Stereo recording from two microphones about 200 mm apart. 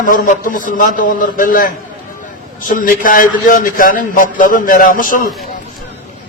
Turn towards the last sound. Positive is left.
turn(degrees=45)  # may be behind; listen again after turning